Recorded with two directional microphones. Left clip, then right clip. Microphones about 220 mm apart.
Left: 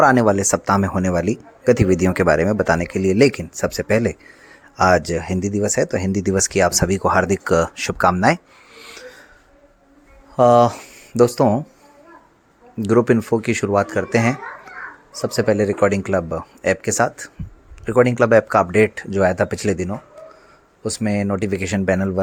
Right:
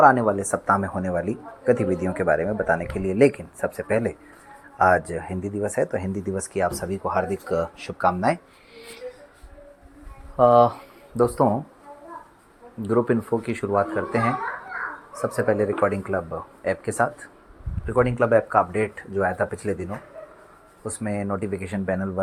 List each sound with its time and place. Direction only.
0.0 s speech: 45° left (ahead or behind)
6.1 s speech: 45° left (ahead or behind)
10.3 s speech: 45° left (ahead or behind)
12.8 s speech: 50° left (ahead or behind)
15.4 s speech: 50° left (ahead or behind)